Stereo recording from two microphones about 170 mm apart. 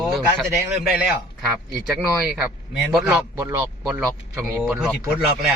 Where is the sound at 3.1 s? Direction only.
15° right (ahead or behind).